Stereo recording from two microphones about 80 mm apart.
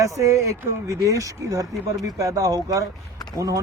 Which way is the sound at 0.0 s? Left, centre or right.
Right.